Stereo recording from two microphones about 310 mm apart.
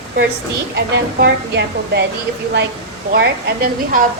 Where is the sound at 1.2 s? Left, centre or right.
Right.